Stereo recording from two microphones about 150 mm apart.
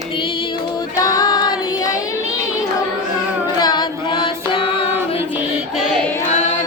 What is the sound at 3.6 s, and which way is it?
Singing, 30° left (ahead or behind).